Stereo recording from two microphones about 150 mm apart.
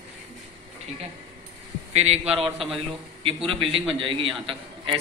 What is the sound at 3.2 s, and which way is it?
A man's voice, 35° right (ahead or behind).